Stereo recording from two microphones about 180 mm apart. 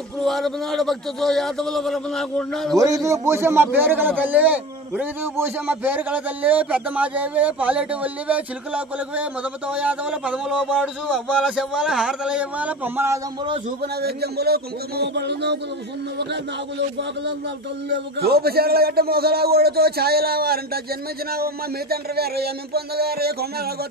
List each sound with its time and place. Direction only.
0.2 s a man's voice: centre (ahead or behind)
3.1 s a man's voice: 15° right (ahead or behind)
14.0 s a man's voice: 60° right (ahead or behind)
17.8 s a man's voice: 65° right (ahead or behind)